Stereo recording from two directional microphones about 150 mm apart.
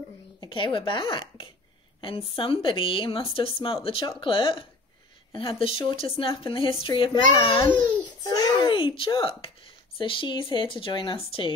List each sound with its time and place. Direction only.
0.5 s a child's voice: 35° left (ahead or behind)